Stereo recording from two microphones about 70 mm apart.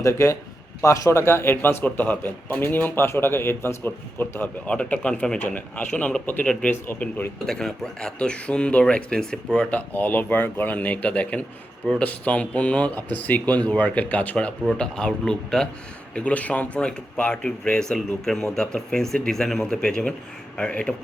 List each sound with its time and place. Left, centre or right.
0.0 s a man's voice: left
4.7 s speech: centre
6.7 s speech: left
7.4 s speech: centre
16.1 s speech: left